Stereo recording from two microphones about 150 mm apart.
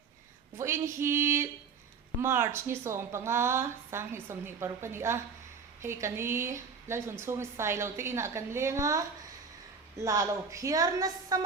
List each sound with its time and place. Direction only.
0.5 s a woman's voice: 20° right (ahead or behind)